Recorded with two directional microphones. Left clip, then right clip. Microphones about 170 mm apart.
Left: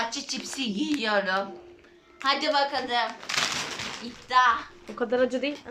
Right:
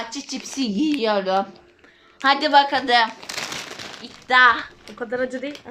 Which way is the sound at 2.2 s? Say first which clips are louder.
Right 8 dB; 50° right (ahead or behind).